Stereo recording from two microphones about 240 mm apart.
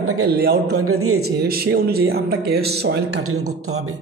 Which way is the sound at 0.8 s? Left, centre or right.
Right.